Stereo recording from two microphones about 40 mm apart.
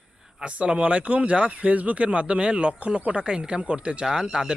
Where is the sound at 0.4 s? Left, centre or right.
Right.